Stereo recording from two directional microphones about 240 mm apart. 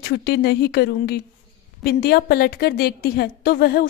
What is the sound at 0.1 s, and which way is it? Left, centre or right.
A woman's voice, left.